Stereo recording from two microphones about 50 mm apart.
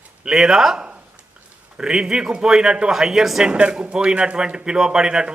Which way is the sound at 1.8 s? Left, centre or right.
Centre.